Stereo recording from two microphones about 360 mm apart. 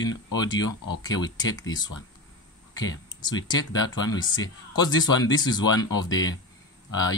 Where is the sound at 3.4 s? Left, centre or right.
Centre.